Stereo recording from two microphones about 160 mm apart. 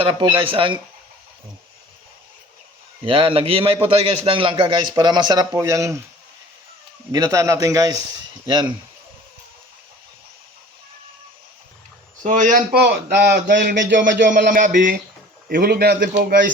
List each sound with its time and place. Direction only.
0.0 s a man's voice: 30° right (ahead or behind)
3.0 s a man's voice: 35° right (ahead or behind); by 6.0 s 20° right (ahead or behind)
7.1 s speech: 20° right (ahead or behind)
12.2 s speech: 55° right (ahead or behind); by 13.6 s 90° right
13.6 s a man's voice: 60° right (ahead or behind); by 14.4 s 90° right
14.5 s speech: 55° right (ahead or behind)
15.4 s a man's voice: 70° right (ahead or behind)